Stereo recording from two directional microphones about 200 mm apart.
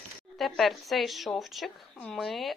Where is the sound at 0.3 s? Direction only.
Centre (ahead or behind).